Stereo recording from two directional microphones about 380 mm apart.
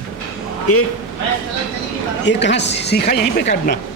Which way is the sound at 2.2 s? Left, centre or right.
Left.